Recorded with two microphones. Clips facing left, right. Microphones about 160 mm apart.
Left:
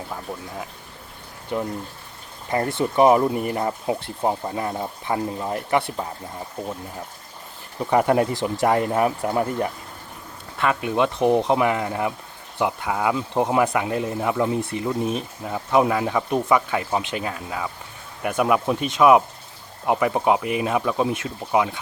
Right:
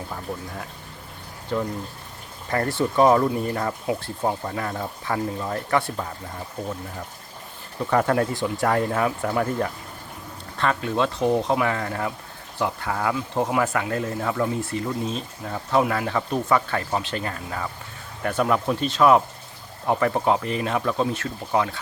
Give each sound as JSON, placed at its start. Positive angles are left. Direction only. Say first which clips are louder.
{"t": 1.5, "sound": "speech", "louder": "even", "side_deg": 15}
{"t": 7.8, "sound": "speech", "louder": "left 2 dB", "side_deg": 15}